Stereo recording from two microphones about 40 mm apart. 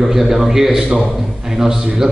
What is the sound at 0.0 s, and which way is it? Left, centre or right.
A man's voice, centre.